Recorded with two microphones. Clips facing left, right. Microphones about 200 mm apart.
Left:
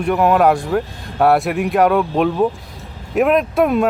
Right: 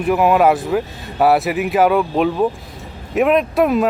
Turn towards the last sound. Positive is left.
turn(degrees=0)  # may be behind; listen again after turning